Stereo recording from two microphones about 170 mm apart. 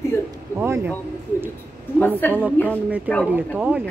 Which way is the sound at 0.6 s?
15° right (ahead or behind).